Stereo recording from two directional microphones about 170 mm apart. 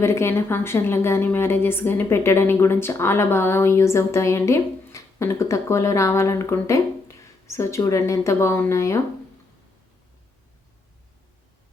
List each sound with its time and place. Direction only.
0.0 s a woman's voice: 15° left (ahead or behind)